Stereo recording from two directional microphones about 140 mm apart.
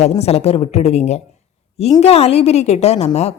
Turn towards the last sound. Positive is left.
turn(degrees=50)  # may be behind; listen again after turning